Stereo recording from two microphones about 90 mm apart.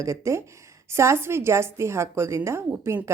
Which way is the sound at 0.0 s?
35° right (ahead or behind).